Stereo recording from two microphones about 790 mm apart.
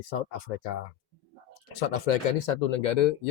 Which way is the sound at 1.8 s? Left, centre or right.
Left.